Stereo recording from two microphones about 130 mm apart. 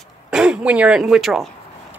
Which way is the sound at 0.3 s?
5° right (ahead or behind).